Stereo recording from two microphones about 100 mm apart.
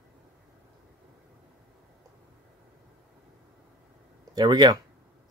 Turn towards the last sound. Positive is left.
turn(degrees=-45)  # may be behind; listen again after turning